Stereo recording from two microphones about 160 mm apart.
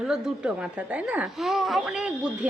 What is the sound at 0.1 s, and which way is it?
A woman's voice, 5° right (ahead or behind).